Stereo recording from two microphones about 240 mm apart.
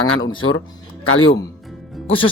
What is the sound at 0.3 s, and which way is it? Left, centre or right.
Speech, left.